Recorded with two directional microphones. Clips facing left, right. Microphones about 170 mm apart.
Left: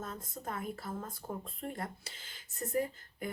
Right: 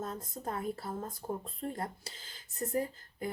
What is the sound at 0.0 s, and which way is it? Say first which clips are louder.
Speech: right 3 dB; 35° right (ahead or behind).